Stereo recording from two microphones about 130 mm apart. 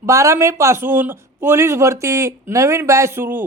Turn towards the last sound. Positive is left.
turn(degrees=-15)  # may be behind; listen again after turning